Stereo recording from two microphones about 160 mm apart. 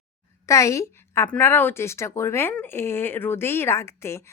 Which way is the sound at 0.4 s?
20° left (ahead or behind).